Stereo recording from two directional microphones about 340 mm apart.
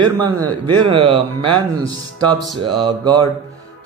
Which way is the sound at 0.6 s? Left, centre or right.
Centre.